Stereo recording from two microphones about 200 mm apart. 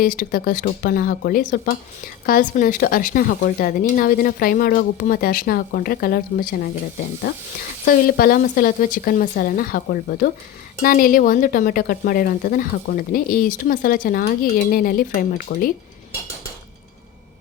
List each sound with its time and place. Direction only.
0.0 s speech: 45° left (ahead or behind)
7.9 s speech: 45° left (ahead or behind)